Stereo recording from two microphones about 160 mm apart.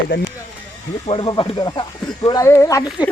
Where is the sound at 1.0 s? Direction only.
30° left (ahead or behind).